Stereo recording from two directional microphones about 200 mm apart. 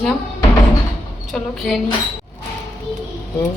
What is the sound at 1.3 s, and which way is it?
Speech, centre (ahead or behind).